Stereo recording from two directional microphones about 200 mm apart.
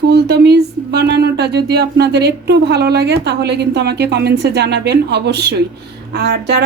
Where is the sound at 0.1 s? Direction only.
55° right (ahead or behind).